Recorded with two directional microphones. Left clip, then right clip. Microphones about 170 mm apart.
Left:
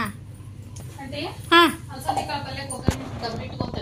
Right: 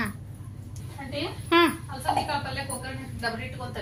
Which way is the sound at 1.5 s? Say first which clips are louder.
Left 5 dB; centre (ahead or behind).